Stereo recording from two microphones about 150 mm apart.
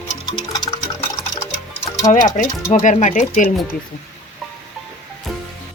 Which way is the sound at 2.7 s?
55° left (ahead or behind).